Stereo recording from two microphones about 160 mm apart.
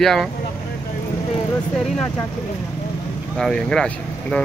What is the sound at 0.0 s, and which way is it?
Speech, centre (ahead or behind).